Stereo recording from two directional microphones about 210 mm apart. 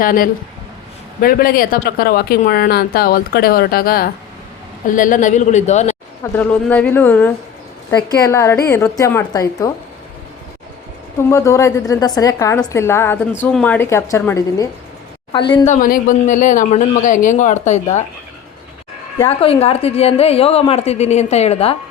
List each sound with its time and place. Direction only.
0.0 s a man's voice: 40° left (ahead or behind)
6.3 s a woman's voice: 5° left (ahead or behind)
11.2 s a woman's voice: 15° left (ahead or behind)
15.6 s a man's voice: 35° left (ahead or behind)
19.2 s a woman's voice: 25° left (ahead or behind)